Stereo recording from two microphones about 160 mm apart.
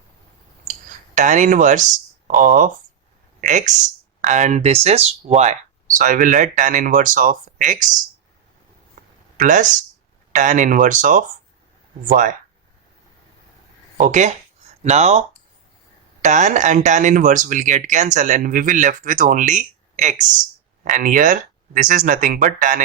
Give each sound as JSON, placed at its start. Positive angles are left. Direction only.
{"t": 0.7, "sound": "cutlery", "side_deg": -50}
{"t": 2.2, "sound": "speech", "side_deg": -55}
{"t": 9.0, "sound": "a sound", "side_deg": -55}
{"t": 9.4, "sound": "speech", "side_deg": -55}
{"t": 14.0, "sound": "speech", "side_deg": -50}
{"t": 16.2, "sound": "speech", "side_deg": -50}